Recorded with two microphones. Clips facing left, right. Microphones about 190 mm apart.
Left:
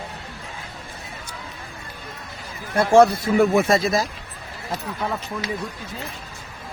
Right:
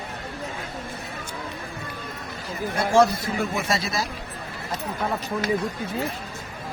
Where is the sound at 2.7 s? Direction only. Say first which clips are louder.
Left 5 dB; 55° left (ahead or behind).